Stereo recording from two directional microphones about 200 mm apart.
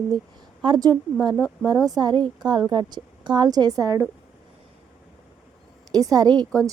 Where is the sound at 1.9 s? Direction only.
20° right (ahead or behind).